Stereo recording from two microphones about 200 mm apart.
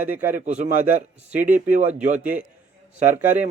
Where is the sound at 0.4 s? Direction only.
35° right (ahead or behind).